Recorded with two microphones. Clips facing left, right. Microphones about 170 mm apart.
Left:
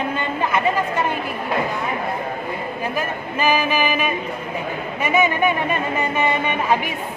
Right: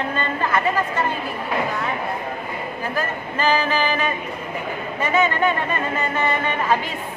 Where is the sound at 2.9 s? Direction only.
15° left (ahead or behind).